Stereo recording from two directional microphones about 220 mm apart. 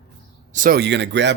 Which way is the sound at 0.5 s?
40° right (ahead or behind).